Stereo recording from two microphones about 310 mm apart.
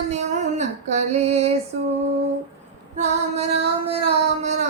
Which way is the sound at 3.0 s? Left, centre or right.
Centre.